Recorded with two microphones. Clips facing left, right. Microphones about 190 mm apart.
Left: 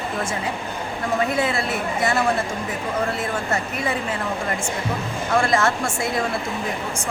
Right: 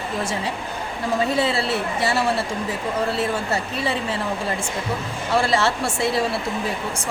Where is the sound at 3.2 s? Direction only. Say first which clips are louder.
Right 1 dB; 35° right (ahead or behind).